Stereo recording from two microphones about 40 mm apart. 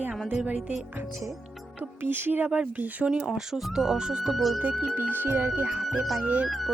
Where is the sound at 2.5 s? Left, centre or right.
Right.